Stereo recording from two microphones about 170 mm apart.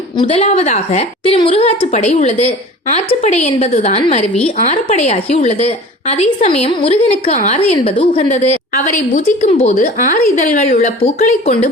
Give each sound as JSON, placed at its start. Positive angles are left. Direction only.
{"t": 0.2, "sound": "a woman's voice", "side_deg": 35}
{"t": 9.8, "sound": "a woman's voice", "side_deg": 60}
{"t": 10.6, "sound": "speech", "side_deg": 45}